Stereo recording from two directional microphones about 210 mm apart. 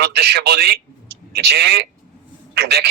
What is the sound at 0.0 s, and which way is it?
Speech, 50° right (ahead or behind).